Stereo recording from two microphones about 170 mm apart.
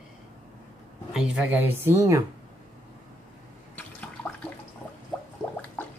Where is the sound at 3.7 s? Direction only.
5° left (ahead or behind).